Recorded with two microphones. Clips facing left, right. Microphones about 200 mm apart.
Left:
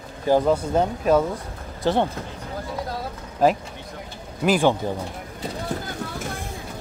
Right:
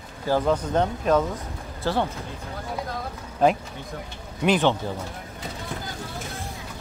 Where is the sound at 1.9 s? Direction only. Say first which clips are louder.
Left 4 dB; 20° left (ahead or behind).